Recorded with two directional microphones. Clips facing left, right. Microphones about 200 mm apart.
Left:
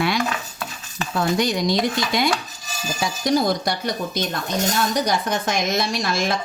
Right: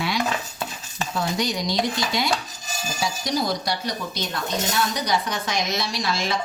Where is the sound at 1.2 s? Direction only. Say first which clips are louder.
Left 5 dB; 55° left (ahead or behind).